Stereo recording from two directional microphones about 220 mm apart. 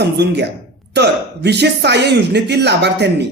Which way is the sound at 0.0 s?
50° right (ahead or behind).